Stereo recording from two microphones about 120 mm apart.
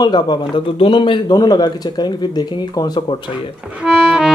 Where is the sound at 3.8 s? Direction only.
5° right (ahead or behind).